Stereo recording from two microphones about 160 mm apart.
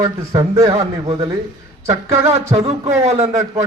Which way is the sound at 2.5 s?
40° right (ahead or behind).